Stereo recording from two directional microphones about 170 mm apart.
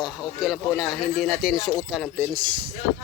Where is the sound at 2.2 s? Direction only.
25° right (ahead or behind).